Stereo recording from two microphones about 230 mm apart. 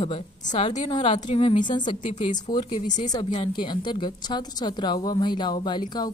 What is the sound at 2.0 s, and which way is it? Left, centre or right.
Speech, left.